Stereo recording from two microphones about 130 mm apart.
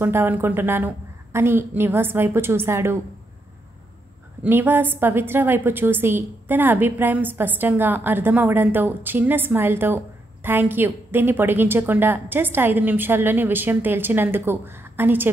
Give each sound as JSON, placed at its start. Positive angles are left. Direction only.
{"t": 0.0, "sound": "a woman's voice", "side_deg": -15}
{"t": 4.4, "sound": "a woman's voice", "side_deg": -15}